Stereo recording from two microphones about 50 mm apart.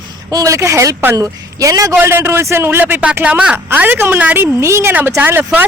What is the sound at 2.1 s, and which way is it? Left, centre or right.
Speech, right.